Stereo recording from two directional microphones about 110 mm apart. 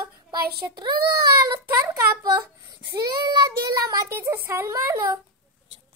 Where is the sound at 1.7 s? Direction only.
30° right (ahead or behind).